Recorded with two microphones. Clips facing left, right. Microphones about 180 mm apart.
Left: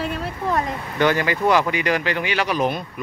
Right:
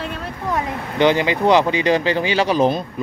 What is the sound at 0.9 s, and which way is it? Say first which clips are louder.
Speech: right 4 dB; 20° right (ahead or behind).